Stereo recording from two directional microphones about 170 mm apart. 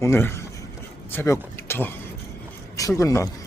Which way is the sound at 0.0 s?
15° left (ahead or behind).